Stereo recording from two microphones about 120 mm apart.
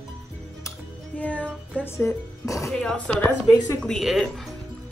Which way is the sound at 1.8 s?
25° left (ahead or behind).